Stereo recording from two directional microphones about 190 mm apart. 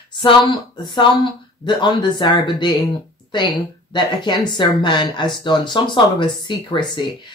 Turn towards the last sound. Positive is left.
turn(degrees=25)  # may be behind; listen again after turning